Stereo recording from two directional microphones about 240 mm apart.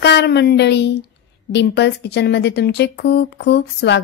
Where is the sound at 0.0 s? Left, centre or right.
Left.